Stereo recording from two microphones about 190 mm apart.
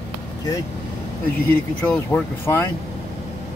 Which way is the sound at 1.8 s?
10° left (ahead or behind).